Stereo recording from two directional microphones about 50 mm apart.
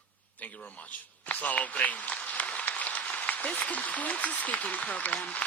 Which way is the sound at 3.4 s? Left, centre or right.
Left.